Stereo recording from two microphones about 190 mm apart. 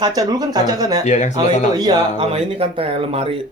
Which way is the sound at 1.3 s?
20° right (ahead or behind).